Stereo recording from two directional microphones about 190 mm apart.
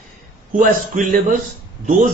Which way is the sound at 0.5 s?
45° right (ahead or behind).